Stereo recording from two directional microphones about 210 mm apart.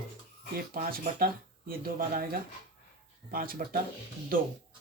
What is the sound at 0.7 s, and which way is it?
Speech, 45° right (ahead or behind).